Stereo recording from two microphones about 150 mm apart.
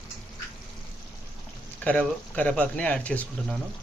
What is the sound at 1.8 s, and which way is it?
Speech, 10° left (ahead or behind).